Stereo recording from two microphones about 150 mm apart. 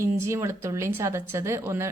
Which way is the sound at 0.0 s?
20° right (ahead or behind).